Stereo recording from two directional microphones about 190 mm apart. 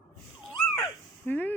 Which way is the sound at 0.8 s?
10° left (ahead or behind).